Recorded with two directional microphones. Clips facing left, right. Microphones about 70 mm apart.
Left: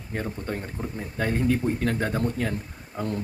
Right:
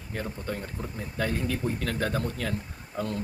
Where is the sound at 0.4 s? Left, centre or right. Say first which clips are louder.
Left 3 dB; left.